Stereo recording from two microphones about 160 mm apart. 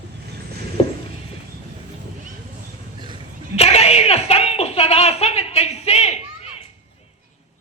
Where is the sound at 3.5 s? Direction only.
40° left (ahead or behind).